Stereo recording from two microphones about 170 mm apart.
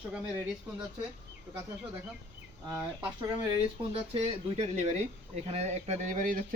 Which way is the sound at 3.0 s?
25° right (ahead or behind).